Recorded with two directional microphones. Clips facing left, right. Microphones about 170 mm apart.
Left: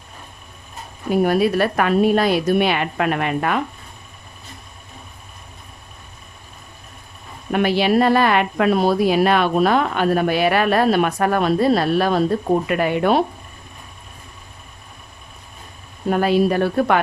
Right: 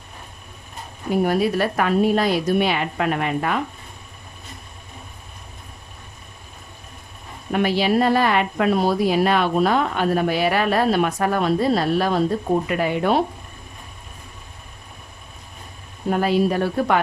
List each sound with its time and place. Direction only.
1.2 s a woman's voice: 65° left (ahead or behind)
7.5 s a woman's voice: 60° left (ahead or behind)
16.2 s a woman's voice: 65° left (ahead or behind)